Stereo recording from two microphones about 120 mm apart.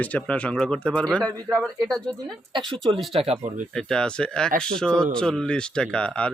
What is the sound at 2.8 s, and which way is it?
A man's voice, centre (ahead or behind).